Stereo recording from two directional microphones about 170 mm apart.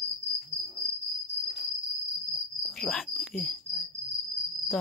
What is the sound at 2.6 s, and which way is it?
Cricket, 5° left (ahead or behind).